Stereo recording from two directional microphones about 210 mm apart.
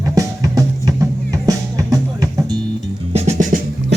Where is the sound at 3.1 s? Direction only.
35° right (ahead or behind).